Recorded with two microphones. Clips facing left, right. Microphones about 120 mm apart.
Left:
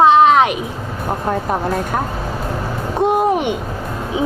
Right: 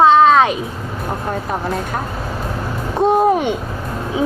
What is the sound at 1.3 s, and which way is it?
Speech, 50° left (ahead or behind).